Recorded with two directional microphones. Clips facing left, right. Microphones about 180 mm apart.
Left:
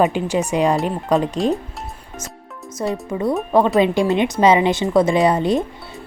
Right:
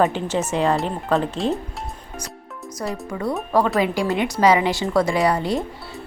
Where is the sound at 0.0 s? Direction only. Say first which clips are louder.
Left 2 dB; 15° left (ahead or behind).